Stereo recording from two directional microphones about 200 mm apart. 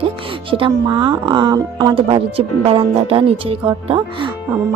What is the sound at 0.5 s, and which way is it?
Speech, 25° right (ahead or behind).